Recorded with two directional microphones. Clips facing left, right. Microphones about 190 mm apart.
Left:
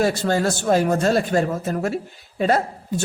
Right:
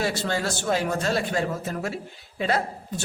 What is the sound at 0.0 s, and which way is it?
A man's voice, 45° left (ahead or behind).